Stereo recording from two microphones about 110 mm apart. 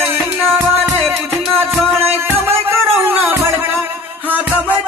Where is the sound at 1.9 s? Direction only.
20° right (ahead or behind).